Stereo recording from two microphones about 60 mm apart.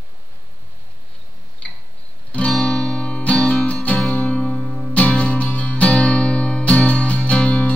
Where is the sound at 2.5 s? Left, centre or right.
Centre.